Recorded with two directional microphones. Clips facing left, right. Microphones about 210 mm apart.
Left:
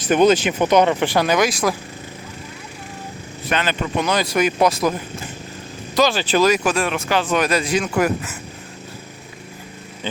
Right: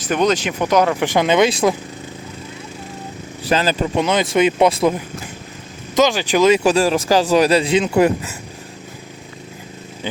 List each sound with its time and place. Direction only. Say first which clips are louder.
0.0 s speech: left 3 dB; 5° left (ahead or behind)
1.0 s speech: right 3 dB; 20° right (ahead or behind)
3.4 s speech: right 4 dB; 35° right (ahead or behind)
6.0 s speech: right 2 dB; 15° right (ahead or behind)
6.5 s speech: right 5 dB; 30° right (ahead or behind)